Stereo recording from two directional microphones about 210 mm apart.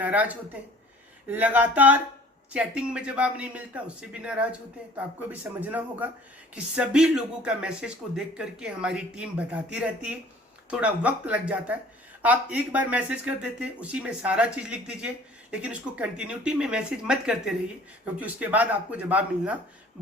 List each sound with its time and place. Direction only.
0.0 s speech: 5° right (ahead or behind)
1.3 s speech: 10° right (ahead or behind)